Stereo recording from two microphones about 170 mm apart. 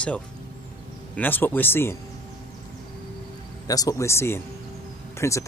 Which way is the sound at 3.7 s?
20° left (ahead or behind).